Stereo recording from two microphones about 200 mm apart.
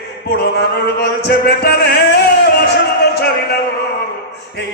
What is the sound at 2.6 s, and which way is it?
Music, 55° left (ahead or behind).